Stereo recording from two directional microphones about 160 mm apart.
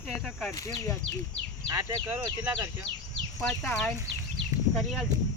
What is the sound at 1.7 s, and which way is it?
Speech, 15° right (ahead or behind).